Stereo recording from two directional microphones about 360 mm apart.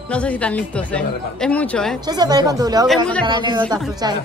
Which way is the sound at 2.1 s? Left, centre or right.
Centre.